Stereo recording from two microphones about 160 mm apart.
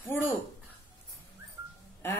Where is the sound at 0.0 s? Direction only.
15° left (ahead or behind).